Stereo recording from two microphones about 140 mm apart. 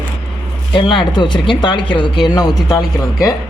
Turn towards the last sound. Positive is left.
turn(degrees=25)  # may be behind; listen again after turning